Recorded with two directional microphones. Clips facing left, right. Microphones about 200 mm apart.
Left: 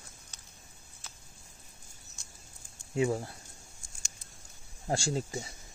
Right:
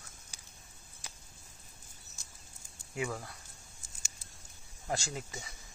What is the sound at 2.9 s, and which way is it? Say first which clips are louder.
Speech: left 8 dB; 30° left (ahead or behind).